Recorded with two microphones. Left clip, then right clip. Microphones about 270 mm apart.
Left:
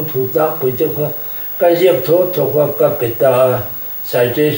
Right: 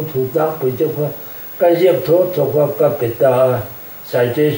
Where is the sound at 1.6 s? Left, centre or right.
Centre.